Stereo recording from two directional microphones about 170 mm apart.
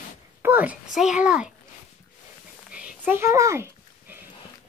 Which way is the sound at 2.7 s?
5° right (ahead or behind).